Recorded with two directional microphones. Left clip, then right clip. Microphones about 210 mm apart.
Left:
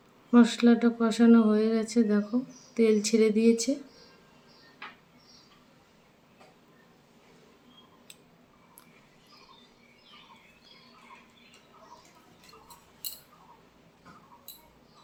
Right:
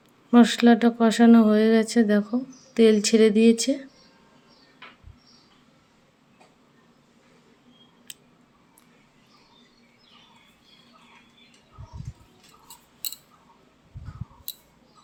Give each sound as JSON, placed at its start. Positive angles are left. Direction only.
{"t": 0.3, "sound": "speech", "side_deg": -35}
{"t": 8.1, "sound": "scissors", "side_deg": -35}